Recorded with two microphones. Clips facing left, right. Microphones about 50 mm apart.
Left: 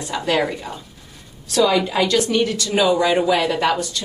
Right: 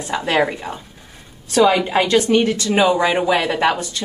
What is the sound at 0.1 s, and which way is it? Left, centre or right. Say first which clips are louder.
A woman's voice: right 2 dB; right.